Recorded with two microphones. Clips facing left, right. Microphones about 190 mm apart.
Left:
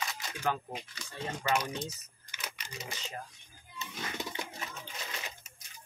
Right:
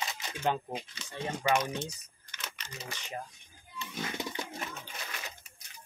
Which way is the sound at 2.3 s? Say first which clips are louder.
Left 1 dB; 10° left (ahead or behind).